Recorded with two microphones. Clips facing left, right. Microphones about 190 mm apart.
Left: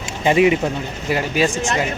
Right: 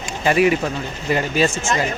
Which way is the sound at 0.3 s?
20° left (ahead or behind).